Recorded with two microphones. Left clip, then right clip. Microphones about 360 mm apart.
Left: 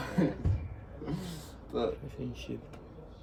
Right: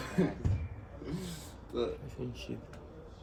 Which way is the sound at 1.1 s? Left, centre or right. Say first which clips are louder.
Left 1 dB; centre.